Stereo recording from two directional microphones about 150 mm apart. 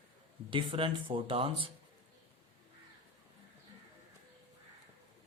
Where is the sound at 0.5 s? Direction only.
35° right (ahead or behind).